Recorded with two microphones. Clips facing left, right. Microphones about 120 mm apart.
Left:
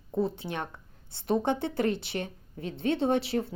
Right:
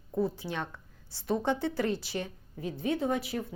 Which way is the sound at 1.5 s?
60° left (ahead or behind).